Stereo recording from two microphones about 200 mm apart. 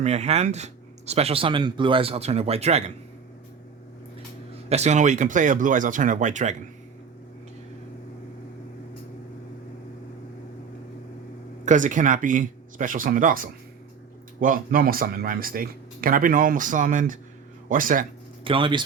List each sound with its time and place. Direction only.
0.0 s speech: 35° right (ahead or behind)
4.7 s speech: 35° right (ahead or behind)
11.6 s speech: 40° right (ahead or behind)
18.4 s speech: 25° right (ahead or behind)